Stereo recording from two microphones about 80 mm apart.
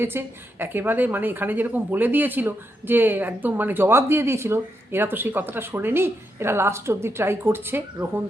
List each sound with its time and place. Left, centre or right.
0.0 s a woman's voice: right